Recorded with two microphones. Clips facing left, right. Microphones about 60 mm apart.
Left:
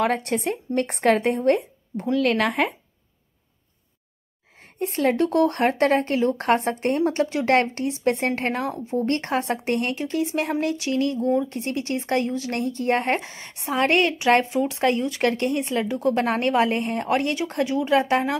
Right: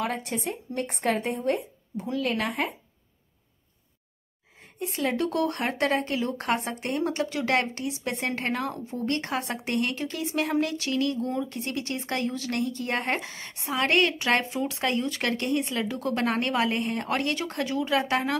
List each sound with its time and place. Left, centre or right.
0.0 s speech: left
4.7 s speech: left